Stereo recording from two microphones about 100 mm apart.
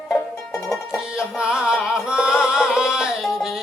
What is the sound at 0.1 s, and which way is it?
Music, centre (ahead or behind).